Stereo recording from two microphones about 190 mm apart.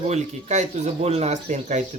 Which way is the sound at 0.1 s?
35° right (ahead or behind).